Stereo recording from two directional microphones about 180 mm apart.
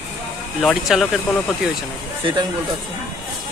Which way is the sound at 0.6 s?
Centre (ahead or behind).